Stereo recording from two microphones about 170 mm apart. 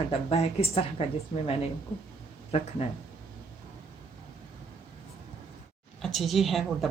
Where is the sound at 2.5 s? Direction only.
40° left (ahead or behind).